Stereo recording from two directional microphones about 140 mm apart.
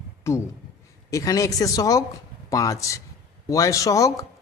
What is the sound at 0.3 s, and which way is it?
Speech, 20° left (ahead or behind).